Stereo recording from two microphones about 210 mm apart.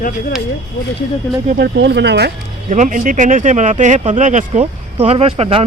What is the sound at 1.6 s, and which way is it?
Speech, 55° right (ahead or behind).